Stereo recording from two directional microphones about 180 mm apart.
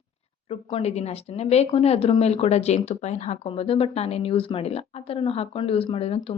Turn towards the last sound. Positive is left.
turn(degrees=30)  # may be behind; listen again after turning